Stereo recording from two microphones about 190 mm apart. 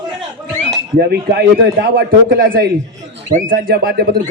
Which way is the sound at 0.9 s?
55° right (ahead or behind).